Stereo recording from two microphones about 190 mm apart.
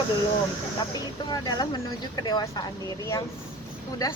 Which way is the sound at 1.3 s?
20° left (ahead or behind).